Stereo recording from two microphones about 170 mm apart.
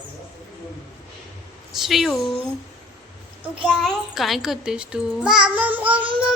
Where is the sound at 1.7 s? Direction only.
Centre (ahead or behind).